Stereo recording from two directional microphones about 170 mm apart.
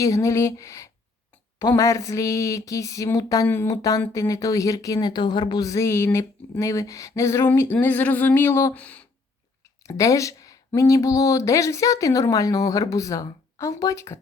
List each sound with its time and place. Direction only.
0.0 s speech: 20° left (ahead or behind)